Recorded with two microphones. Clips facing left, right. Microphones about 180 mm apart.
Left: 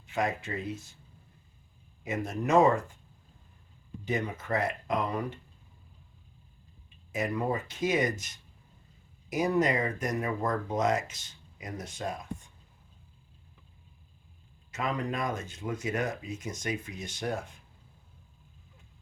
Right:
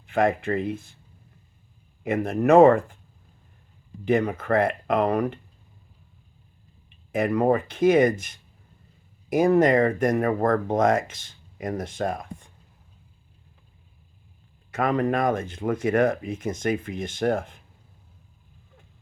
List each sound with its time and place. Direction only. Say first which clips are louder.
0.0 s speech: right 9 dB; 55° right (ahead or behind)
2.0 s speech: right 10 dB; 60° right (ahead or behind)
4.0 s speech: right 10 dB; 60° right (ahead or behind)
7.1 s speech: right 9 dB; 60° right (ahead or behind)
14.7 s speech: right 9 dB; 55° right (ahead or behind)